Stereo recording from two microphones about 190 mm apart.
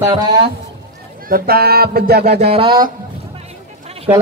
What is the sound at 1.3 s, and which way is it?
Speech, 50° right (ahead or behind).